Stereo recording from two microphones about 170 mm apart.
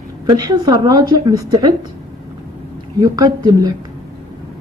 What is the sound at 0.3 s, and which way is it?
A woman's voice, 20° right (ahead or behind).